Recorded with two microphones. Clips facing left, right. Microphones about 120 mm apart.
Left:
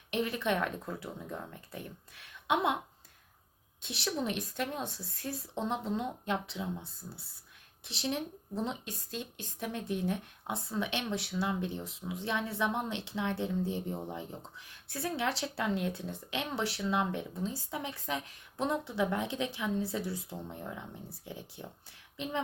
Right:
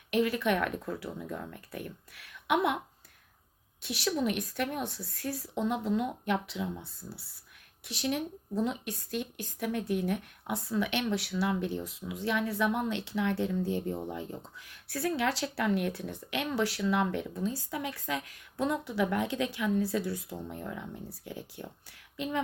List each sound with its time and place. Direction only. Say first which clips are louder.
0.1 s speech: right 4 dB; 25° left (ahead or behind)
3.8 s speech: right 4 dB; 25° left (ahead or behind)